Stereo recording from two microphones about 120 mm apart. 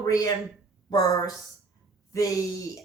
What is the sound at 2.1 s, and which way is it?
Speech, 25° left (ahead or behind).